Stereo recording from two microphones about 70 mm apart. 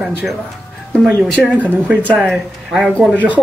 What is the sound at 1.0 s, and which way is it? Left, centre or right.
Speech, centre.